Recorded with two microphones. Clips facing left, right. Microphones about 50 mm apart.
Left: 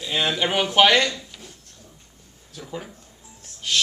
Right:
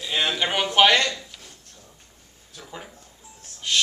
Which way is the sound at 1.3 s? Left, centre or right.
Centre.